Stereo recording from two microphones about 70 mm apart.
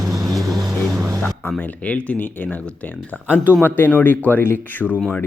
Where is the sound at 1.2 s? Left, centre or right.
Left.